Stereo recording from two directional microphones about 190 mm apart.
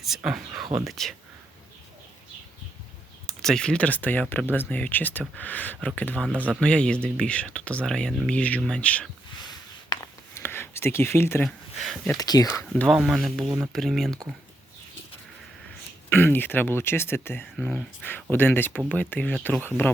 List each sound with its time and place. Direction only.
0.0 s speech: centre (ahead or behind)
3.2 s speech: centre (ahead or behind)
9.9 s a sound: 15° left (ahead or behind)
11.4 s speech: centre (ahead or behind)
12.1 s speech: 20° left (ahead or behind)
12.6 s speech: 5° left (ahead or behind)
16.0 s speech: 10° left (ahead or behind)